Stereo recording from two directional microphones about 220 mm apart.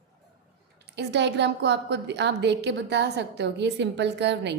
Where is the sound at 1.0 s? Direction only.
50° right (ahead or behind).